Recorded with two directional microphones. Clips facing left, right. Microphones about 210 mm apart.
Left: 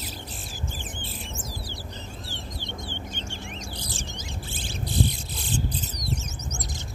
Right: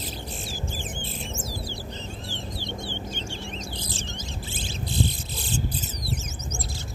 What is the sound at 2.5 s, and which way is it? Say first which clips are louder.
Chicken: right 3 dB; 20° left (ahead or behind).